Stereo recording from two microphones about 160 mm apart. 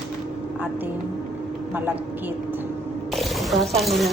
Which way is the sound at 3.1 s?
Centre (ahead or behind).